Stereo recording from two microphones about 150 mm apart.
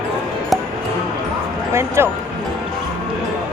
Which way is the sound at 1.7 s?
20° right (ahead or behind).